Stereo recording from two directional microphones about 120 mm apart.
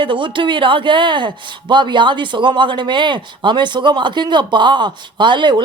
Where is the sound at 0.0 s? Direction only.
45° right (ahead or behind).